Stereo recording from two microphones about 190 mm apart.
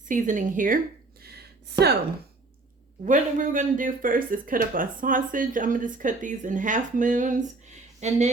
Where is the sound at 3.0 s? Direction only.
40° right (ahead or behind).